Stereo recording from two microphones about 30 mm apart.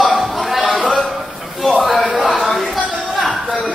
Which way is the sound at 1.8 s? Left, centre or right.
Centre.